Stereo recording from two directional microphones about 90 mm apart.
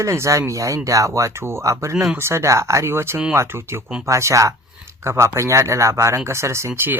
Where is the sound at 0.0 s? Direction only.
35° right (ahead or behind).